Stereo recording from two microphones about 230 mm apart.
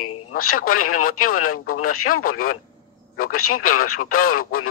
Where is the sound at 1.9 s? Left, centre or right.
Left.